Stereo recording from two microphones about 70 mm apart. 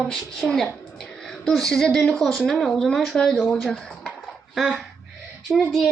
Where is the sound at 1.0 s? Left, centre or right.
Centre.